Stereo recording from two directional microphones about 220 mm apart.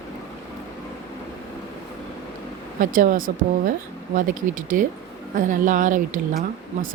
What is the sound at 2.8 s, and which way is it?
A woman's voice, 40° right (ahead or behind).